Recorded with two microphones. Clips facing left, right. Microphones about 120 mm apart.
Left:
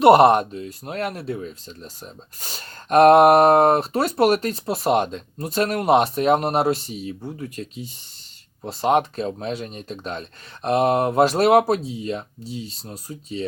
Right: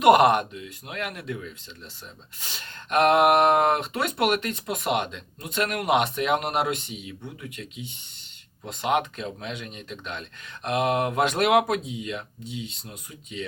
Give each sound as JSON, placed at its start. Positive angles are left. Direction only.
{"t": 0.0, "sound": "speech", "side_deg": 30}